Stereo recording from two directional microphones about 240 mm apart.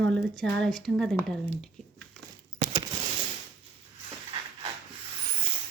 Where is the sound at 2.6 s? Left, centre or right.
Centre.